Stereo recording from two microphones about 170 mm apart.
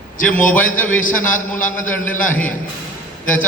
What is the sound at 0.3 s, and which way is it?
A man's voice, 10° left (ahead or behind).